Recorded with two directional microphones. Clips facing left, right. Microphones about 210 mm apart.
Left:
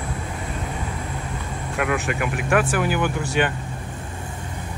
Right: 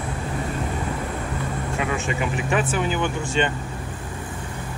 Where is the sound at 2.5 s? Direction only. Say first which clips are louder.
Left 3 dB; centre (ahead or behind).